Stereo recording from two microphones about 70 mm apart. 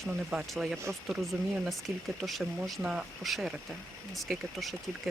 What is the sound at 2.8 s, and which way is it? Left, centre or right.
Speech, centre.